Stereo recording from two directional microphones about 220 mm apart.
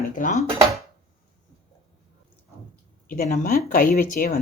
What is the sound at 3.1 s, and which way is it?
Speech, 40° left (ahead or behind).